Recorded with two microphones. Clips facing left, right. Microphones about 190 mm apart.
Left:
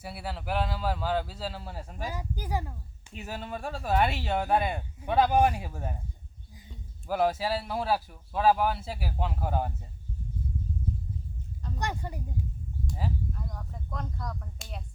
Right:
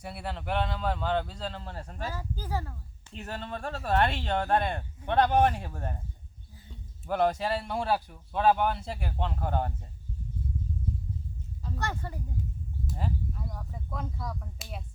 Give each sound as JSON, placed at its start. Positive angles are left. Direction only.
{"t": 0.0, "sound": "speech", "side_deg": 5}
{"t": 7.0, "sound": "speech", "side_deg": 5}
{"t": 11.8, "sound": "speech", "side_deg": 15}
{"t": 12.9, "sound": "speech", "side_deg": 0}